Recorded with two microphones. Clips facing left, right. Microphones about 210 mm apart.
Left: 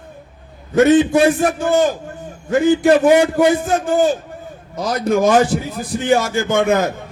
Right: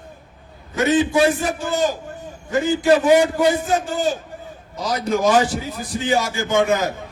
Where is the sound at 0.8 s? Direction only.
55° left (ahead or behind).